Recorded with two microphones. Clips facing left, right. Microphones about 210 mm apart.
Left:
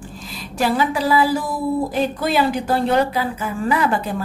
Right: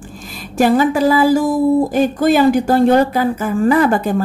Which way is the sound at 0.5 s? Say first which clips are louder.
Right 7 dB; 45° right (ahead or behind).